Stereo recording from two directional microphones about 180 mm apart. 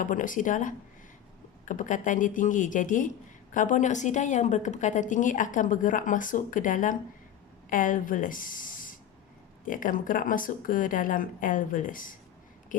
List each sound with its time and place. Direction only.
0.0 s a woman's voice: 45° left (ahead or behind)